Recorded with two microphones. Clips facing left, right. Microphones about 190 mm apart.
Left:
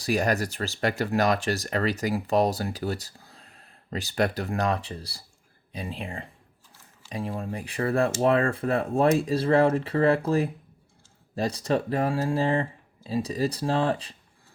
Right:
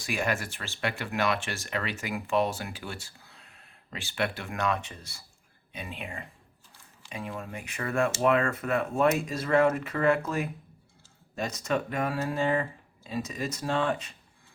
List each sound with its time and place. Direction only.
0.0 s speech: 40° left (ahead or behind)